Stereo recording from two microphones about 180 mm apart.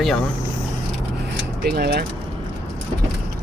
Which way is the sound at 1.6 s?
60° right (ahead or behind).